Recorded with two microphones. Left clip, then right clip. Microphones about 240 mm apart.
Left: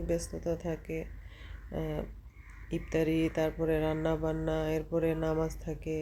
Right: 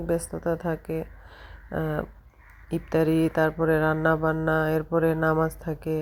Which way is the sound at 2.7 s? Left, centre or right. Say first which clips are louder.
Right 7 dB; centre.